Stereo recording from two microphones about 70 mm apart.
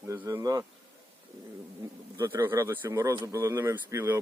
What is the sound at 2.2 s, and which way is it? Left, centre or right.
Speech, right.